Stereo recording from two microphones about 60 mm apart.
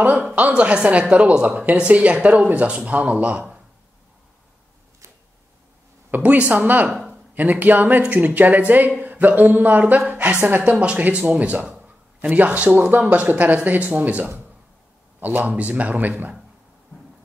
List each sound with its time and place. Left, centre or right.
0.5 s speech: centre
6.0 s a woman's voice: right